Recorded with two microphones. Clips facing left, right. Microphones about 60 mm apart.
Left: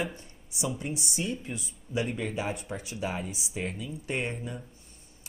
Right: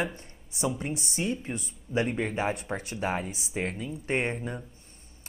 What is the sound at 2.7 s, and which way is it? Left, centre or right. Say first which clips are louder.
Speech: right 3 dB; right.